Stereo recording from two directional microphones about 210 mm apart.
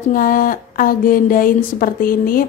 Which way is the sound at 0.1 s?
40° left (ahead or behind).